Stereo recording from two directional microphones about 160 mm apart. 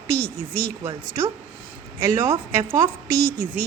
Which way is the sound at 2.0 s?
15° right (ahead or behind).